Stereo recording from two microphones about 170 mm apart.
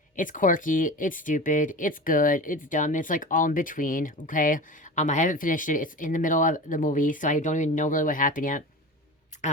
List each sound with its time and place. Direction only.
0.2 s speech: 50° left (ahead or behind)